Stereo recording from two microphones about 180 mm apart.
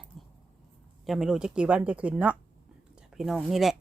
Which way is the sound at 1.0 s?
Centre (ahead or behind).